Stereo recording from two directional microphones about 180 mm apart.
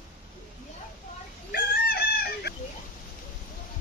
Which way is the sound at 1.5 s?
55° left (ahead or behind).